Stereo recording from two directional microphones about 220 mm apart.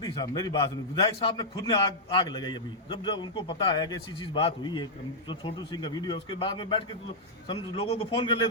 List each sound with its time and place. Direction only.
0.0 s a man's voice: 20° left (ahead or behind)